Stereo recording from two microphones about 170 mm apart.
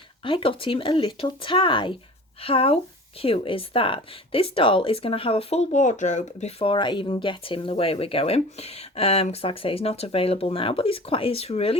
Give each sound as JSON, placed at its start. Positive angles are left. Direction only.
{"t": 0.3, "sound": "speech", "side_deg": 30}